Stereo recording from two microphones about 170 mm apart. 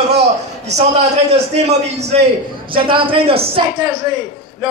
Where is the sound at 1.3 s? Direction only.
40° right (ahead or behind).